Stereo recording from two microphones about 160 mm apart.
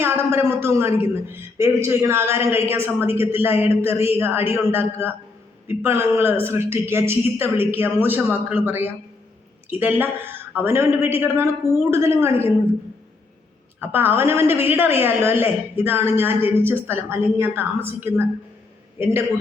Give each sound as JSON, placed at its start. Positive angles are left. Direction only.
{"t": 0.0, "sound": "a man's voice", "side_deg": -15}
{"t": 13.7, "sound": "a man's voice", "side_deg": -15}